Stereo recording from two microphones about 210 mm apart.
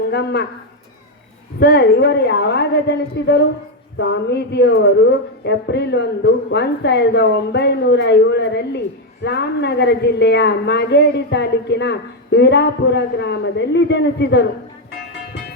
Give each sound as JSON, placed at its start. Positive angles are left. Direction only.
{"t": 0.1, "sound": "a woman's voice", "side_deg": 50}
{"t": 1.5, "sound": "a woman's voice", "side_deg": 50}